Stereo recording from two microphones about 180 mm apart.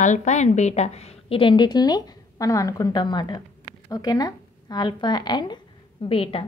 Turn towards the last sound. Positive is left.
turn(degrees=30)  # may be behind; listen again after turning